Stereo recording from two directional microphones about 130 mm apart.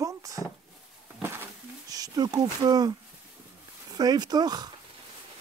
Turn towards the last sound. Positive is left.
turn(degrees=-30)  # may be behind; listen again after turning